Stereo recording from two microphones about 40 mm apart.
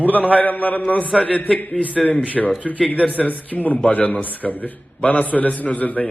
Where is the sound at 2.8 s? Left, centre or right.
Left.